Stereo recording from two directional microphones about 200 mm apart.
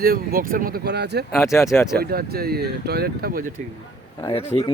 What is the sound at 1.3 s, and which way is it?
Speech, 15° left (ahead or behind).